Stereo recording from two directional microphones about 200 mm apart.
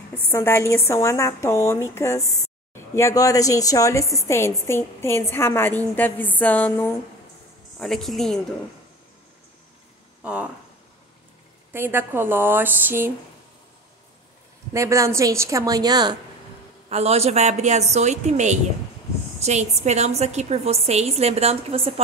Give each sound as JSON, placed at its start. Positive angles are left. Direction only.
{"t": 0.2, "sound": "speech", "side_deg": 10}
{"t": 10.2, "sound": "a woman's voice", "side_deg": -5}
{"t": 11.7, "sound": "a woman's voice", "side_deg": -10}
{"t": 14.7, "sound": "a woman's voice", "side_deg": -15}
{"t": 16.9, "sound": "a woman's voice", "side_deg": -30}